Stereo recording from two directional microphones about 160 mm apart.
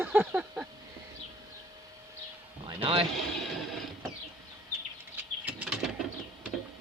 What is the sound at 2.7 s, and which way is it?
Speech, 35° right (ahead or behind).